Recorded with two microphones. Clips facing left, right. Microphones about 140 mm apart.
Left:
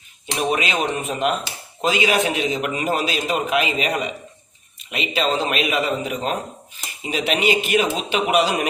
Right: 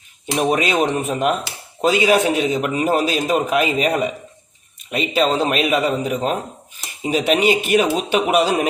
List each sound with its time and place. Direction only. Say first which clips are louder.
0.3 s a man's voice: right 4 dB; 40° right (ahead or behind)